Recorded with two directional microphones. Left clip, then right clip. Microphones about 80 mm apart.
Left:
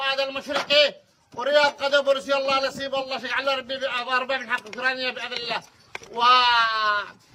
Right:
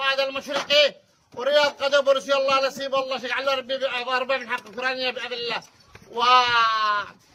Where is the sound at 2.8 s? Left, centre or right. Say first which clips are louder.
Right 2 dB; right.